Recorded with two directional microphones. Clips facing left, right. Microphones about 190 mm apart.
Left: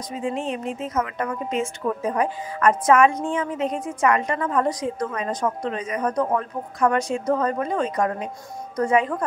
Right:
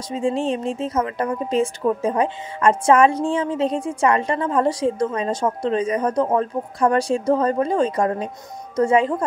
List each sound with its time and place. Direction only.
0.1 s speech: 30° right (ahead or behind)